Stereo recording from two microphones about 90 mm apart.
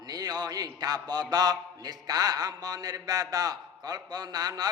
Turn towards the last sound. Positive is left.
turn(degrees=-45)  # may be behind; listen again after turning